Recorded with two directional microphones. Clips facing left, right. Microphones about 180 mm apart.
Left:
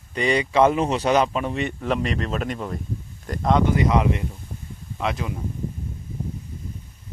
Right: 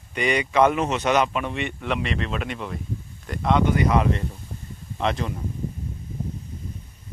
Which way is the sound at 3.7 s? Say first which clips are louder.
Left 1 dB; 20° left (ahead or behind).